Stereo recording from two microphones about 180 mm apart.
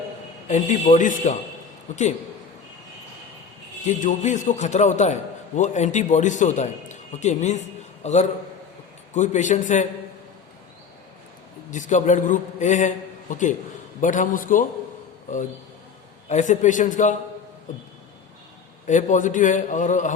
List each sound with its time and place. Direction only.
0.4 s a man's voice: 40° left (ahead or behind)
3.8 s a man's voice: 40° left (ahead or behind)
11.7 s a man's voice: 45° left (ahead or behind)
14.0 s a man's voice: 45° left (ahead or behind)
16.3 s a man's voice: 40° left (ahead or behind)
18.9 s a man's voice: 45° left (ahead or behind)